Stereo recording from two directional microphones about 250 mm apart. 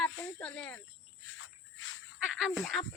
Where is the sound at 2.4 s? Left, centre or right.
Centre.